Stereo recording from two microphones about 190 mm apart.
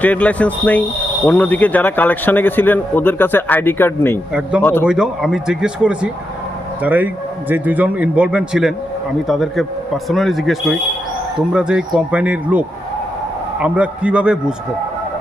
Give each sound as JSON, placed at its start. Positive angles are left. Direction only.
{"t": 0.0, "sound": "speech", "side_deg": 10}
{"t": 4.3, "sound": "speech", "side_deg": -5}
{"t": 4.6, "sound": "speech", "side_deg": 10}
{"t": 4.9, "sound": "a man's voice", "side_deg": -5}